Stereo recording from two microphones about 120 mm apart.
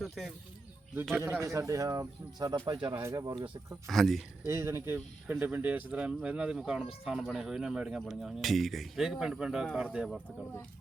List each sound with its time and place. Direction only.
0.0 s speech: centre (ahead or behind)
1.2 s speech: 25° right (ahead or behind); by 3.0 s 40° right (ahead or behind)
3.0 s speech: 25° right (ahead or behind)
3.3 s speech: 45° right (ahead or behind)
3.8 s speech: centre (ahead or behind)
4.4 s speech: 25° right (ahead or behind); by 10.2 s 5° right (ahead or behind)